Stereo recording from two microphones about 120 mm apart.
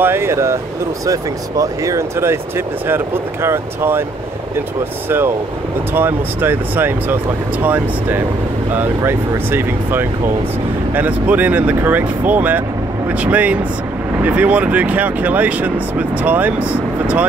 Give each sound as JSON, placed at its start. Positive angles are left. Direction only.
{"t": 0.0, "sound": "speech", "side_deg": -20}
{"t": 5.9, "sound": "speech", "side_deg": -15}